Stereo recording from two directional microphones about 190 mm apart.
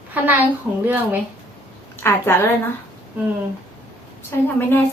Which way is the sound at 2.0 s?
10° left (ahead or behind).